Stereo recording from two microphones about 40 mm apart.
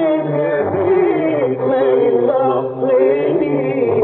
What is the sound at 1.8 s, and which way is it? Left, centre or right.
Singing, centre.